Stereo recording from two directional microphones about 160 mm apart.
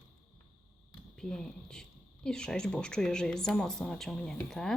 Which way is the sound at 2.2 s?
5° left (ahead or behind).